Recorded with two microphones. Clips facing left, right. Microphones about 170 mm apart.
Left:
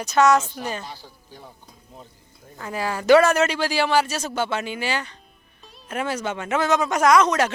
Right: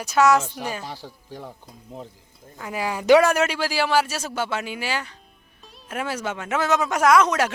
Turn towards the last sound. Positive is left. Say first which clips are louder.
# left 1 dB
turn(degrees=-10)  # may be behind; listen again after turning